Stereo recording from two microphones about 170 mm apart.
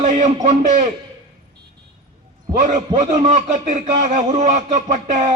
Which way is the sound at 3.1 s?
45° right (ahead or behind).